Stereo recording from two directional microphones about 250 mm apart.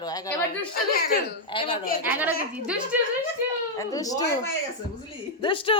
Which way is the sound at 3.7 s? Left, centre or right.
Centre.